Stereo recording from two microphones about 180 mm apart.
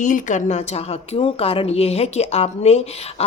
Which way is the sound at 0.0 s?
45° left (ahead or behind).